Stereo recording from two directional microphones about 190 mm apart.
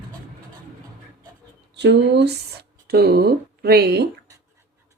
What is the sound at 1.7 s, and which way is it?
Speech, 60° right (ahead or behind).